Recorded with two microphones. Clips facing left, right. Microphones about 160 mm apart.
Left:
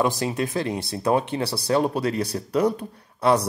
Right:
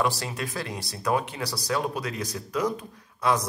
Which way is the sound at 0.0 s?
25° left (ahead or behind).